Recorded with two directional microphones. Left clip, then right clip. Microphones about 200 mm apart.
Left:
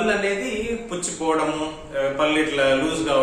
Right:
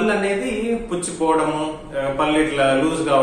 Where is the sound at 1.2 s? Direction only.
5° left (ahead or behind).